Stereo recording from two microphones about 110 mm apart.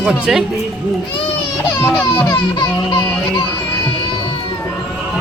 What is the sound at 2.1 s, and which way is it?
Music, 30° left (ahead or behind).